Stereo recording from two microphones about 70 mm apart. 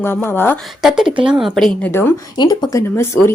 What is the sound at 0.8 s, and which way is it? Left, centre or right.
Speech, centre.